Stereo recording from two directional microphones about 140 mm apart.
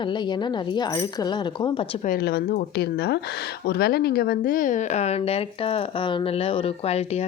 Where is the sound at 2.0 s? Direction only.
80° left.